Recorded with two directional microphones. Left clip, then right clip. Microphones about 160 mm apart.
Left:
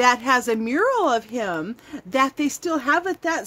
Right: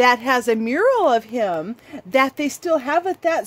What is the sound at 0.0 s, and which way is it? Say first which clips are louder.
Speech: right 2 dB; 30° right (ahead or behind).